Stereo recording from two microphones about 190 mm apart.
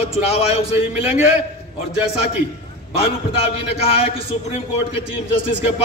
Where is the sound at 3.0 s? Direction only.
30° left (ahead or behind).